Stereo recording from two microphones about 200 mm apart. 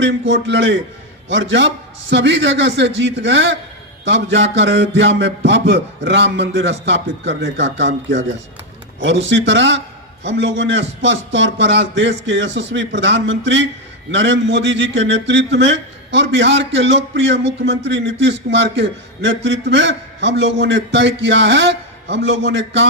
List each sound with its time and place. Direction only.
0.0 s a man's voice: 65° right (ahead or behind)